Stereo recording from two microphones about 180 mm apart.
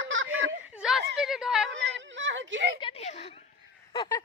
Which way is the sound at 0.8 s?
5° right (ahead or behind).